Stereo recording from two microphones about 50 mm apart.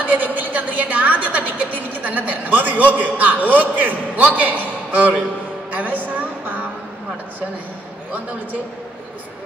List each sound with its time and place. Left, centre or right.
0.0 s music: right
4.4 s a man's voice: right
5.7 s a sound: right